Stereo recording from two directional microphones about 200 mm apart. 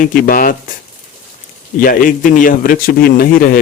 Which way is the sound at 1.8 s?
45° left (ahead or behind).